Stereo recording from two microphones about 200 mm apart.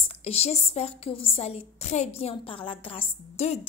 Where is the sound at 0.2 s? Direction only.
30° left (ahead or behind).